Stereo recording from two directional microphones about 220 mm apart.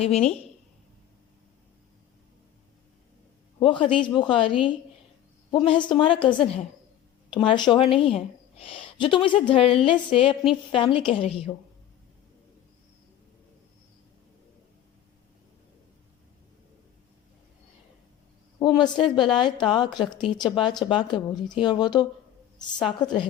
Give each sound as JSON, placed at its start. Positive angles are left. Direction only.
{"t": 0.0, "sound": "a woman's voice", "side_deg": 30}
{"t": 3.6, "sound": "a woman's voice", "side_deg": 25}
{"t": 18.6, "sound": "a woman's voice", "side_deg": 20}